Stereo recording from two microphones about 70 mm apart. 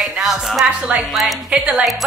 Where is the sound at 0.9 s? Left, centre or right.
Right.